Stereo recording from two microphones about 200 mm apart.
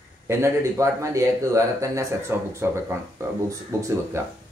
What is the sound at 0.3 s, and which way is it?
Speech, 15° right (ahead or behind).